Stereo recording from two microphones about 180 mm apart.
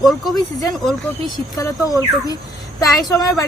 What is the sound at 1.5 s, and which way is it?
Speech, 20° left (ahead or behind).